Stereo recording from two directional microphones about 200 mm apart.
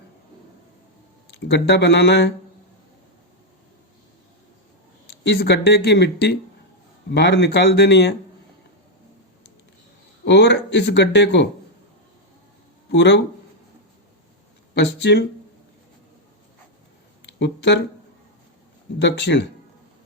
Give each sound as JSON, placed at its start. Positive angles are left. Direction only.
{"t": 1.3, "sound": "speech", "side_deg": 60}
{"t": 5.2, "sound": "speech", "side_deg": 60}
{"t": 10.2, "sound": "speech", "side_deg": 60}
{"t": 12.9, "sound": "speech", "side_deg": 60}
{"t": 14.8, "sound": "speech", "side_deg": 60}
{"t": 17.2, "sound": "a sound", "side_deg": 60}
{"t": 18.9, "sound": "speech", "side_deg": 60}